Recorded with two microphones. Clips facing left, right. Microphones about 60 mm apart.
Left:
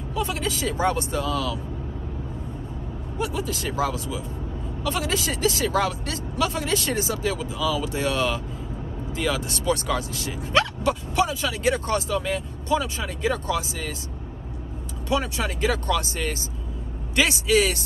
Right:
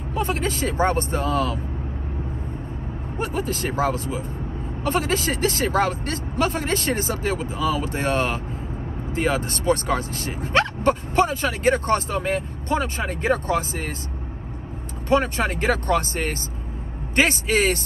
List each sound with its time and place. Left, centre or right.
0.1 s speech: right
3.2 s speech: right
15.0 s speech: right